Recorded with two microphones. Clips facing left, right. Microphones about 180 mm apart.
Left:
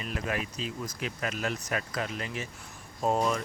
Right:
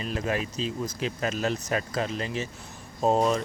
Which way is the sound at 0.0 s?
30° right (ahead or behind).